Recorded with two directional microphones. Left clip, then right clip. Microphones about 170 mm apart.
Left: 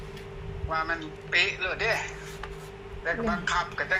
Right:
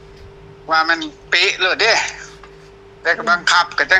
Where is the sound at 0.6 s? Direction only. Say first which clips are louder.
Right 14 dB; 90° right.